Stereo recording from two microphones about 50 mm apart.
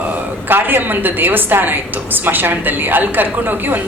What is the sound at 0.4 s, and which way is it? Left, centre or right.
A woman's voice, right.